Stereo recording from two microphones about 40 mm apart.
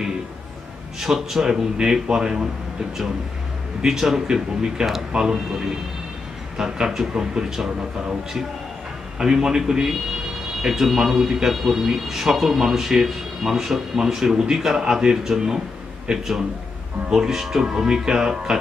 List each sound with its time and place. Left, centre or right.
0.9 s speech: centre
3.8 s speech: centre
9.2 s a man's voice: centre